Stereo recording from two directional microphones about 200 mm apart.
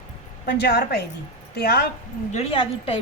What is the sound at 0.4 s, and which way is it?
A woman's voice, 55° left (ahead or behind).